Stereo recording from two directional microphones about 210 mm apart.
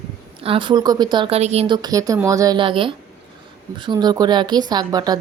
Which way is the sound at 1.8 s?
15° right (ahead or behind).